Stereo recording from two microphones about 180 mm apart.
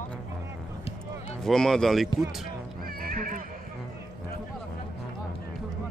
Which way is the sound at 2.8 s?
55° right (ahead or behind).